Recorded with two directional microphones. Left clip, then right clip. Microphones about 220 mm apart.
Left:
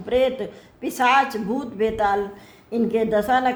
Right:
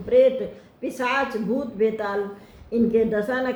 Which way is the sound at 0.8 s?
40° left (ahead or behind).